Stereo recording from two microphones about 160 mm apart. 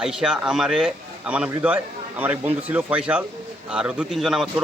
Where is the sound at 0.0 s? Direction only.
5° right (ahead or behind).